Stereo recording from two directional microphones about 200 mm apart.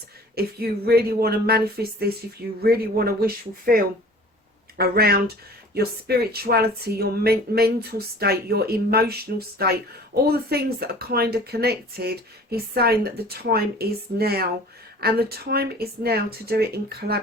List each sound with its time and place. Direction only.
0.3 s speech: 50° right (ahead or behind)
10.2 s speech: 50° right (ahead or behind)